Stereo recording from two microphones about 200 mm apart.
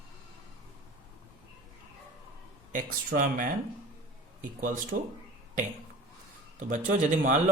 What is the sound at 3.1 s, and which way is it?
Speech, 45° right (ahead or behind).